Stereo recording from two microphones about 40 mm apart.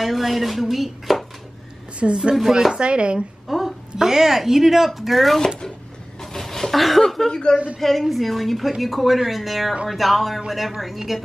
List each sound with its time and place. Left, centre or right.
0.0 s dishes: centre
2.0 s a woman's voice: right
3.4 s a woman's voice: centre
6.2 s a sound: centre
7.5 s speech: right
8.0 s dishes: centre